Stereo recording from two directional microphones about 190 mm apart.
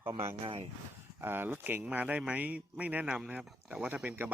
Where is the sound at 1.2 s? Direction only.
10° right (ahead or behind).